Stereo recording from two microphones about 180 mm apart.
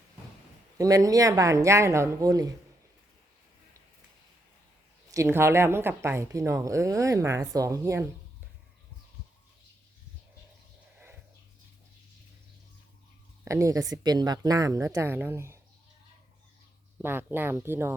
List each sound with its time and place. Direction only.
0.8 s speech: 20° right (ahead or behind)
5.1 s a woman's voice: 15° right (ahead or behind)
10.9 s a sound: 10° right (ahead or behind)
13.4 s a woman's voice: 15° right (ahead or behind)
17.0 s a woman's voice: 10° right (ahead or behind)